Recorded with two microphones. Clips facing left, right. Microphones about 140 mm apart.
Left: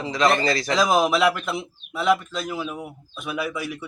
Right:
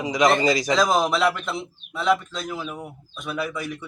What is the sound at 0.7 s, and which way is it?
Speech, 5° left (ahead or behind).